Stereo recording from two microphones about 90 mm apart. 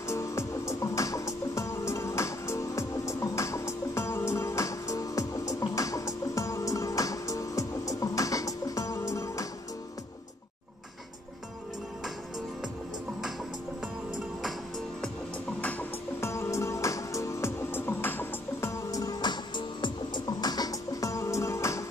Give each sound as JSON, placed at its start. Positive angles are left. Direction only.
{"t": 0.1, "sound": "music", "side_deg": 35}
{"t": 16.2, "sound": "music", "side_deg": 30}